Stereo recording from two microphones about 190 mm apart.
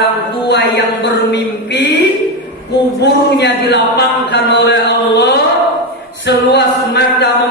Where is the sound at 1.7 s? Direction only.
65° left (ahead or behind).